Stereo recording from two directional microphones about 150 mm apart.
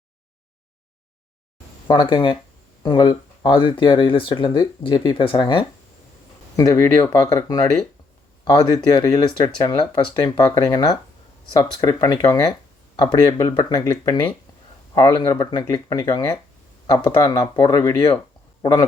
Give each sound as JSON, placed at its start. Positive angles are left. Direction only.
{"t": 1.9, "sound": "speech", "side_deg": 35}